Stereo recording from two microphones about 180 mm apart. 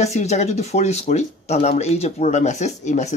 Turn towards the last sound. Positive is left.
turn(degrees=40)  # may be behind; listen again after turning